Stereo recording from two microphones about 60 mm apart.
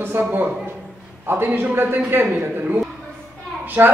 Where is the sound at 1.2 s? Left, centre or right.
Right.